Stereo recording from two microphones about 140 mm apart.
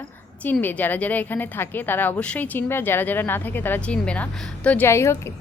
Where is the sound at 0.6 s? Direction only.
10° left (ahead or behind).